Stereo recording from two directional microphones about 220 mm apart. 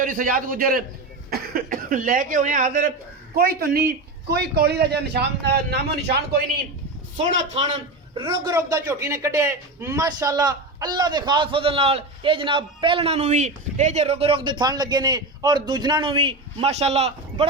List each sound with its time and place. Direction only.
0.0 s a man's voice: 40° right (ahead or behind)
7.5 s a man's voice: 30° right (ahead or behind)